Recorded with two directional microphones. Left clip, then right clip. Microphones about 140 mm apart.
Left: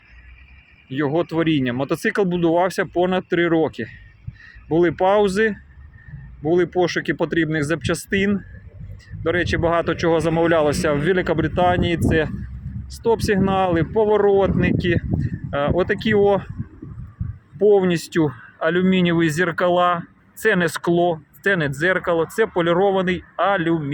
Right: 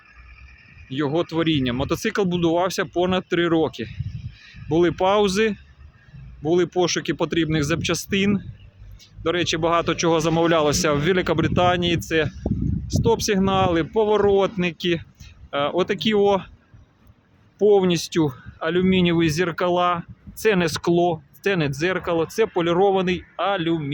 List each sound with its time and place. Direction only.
0.9 s speech: 10° right (ahead or behind)
17.6 s speech: 15° right (ahead or behind)